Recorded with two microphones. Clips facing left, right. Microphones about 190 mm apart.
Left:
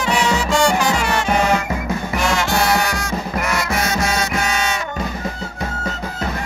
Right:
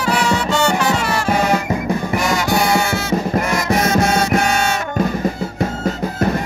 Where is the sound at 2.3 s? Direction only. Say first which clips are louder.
Right 1 dB; 20° right (ahead or behind).